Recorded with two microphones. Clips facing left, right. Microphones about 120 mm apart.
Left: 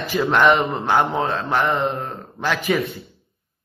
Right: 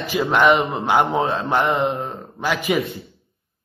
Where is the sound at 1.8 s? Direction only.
Centre (ahead or behind).